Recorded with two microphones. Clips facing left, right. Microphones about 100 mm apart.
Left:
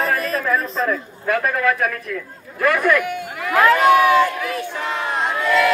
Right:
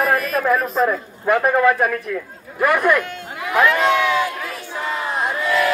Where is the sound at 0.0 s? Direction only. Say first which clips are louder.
Right 2 dB; 30° left (ahead or behind).